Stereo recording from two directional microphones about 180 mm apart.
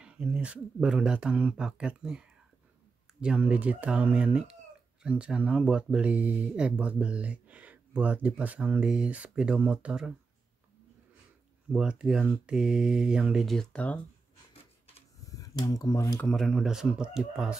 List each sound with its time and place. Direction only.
0.0 s speech: 5° right (ahead or behind)
11.7 s speech: 5° right (ahead or behind)
15.2 s speech: 20° left (ahead or behind)
16.3 s speech: centre (ahead or behind)